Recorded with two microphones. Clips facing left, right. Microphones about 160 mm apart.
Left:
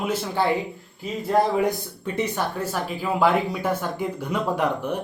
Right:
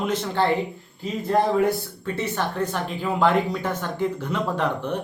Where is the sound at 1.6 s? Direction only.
15° left (ahead or behind).